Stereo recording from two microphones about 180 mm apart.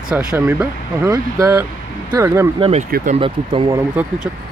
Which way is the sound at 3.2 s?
30° right (ahead or behind).